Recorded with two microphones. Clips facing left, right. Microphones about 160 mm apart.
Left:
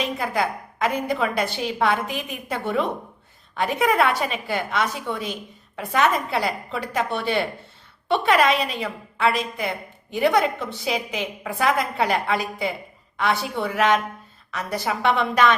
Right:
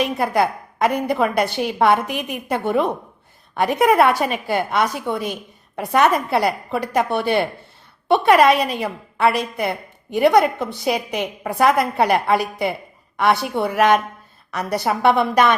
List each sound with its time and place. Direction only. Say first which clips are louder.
0.0 s a woman's voice: right 5 dB; 65° right (ahead or behind)
8.0 s a woman's voice: right 6 dB; 45° right (ahead or behind)
8.7 s a woman's voice: right 4 dB; 60° right (ahead or behind)
14.8 s a woman's voice: right 5 dB; 50° right (ahead or behind)